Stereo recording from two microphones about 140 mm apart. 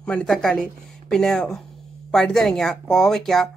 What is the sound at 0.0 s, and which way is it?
Speech, 5° left (ahead or behind).